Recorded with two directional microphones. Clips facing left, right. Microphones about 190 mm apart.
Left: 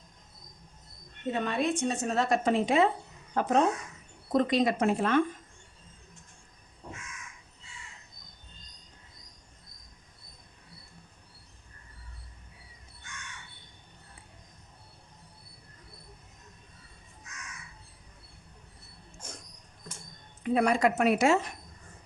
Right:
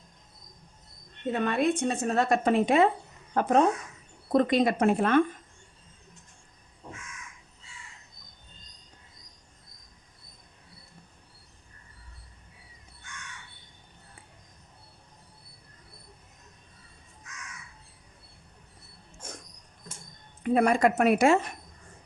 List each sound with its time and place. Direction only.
1.3 s a woman's voice: 55° right (ahead or behind)
20.4 s a woman's voice: 50° right (ahead or behind)